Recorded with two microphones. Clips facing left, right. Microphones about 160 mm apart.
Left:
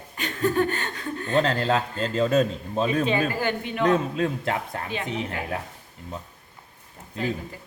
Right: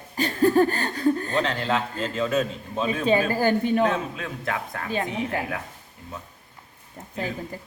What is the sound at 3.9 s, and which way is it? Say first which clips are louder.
Speech: left 6 dB; 35° left (ahead or behind).